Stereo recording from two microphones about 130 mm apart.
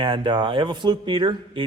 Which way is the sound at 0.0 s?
40° right (ahead or behind).